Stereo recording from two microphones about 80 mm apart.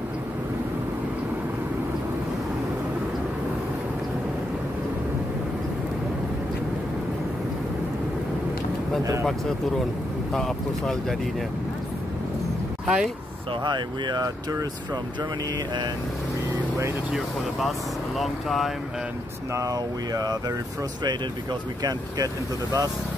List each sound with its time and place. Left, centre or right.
10.3 s speech: centre
12.8 s speech: centre
13.7 s speech: right
17.1 s speech: centre
19.5 s speech: right
21.8 s speech: right